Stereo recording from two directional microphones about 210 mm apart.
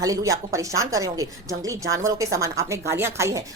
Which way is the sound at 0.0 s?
15° right (ahead or behind).